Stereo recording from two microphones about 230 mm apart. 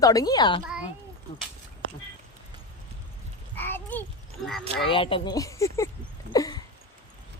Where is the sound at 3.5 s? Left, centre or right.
Centre.